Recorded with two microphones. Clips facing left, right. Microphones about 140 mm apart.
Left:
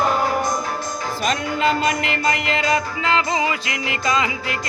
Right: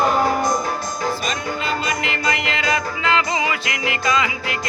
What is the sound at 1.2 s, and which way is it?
Music, 70° left (ahead or behind).